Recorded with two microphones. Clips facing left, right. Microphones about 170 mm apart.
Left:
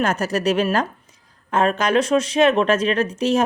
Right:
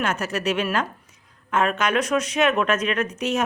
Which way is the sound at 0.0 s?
40° left (ahead or behind).